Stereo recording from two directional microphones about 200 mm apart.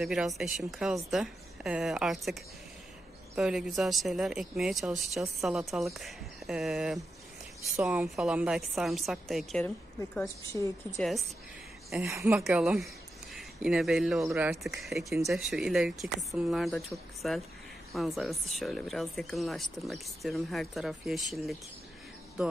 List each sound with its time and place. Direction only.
0.0 s speech: centre (ahead or behind)
3.3 s speech: centre (ahead or behind)
10.1 s a woman's voice: 15° left (ahead or behind)
11.0 s speech: centre (ahead or behind)
12.0 s a woman's voice: 10° right (ahead or behind)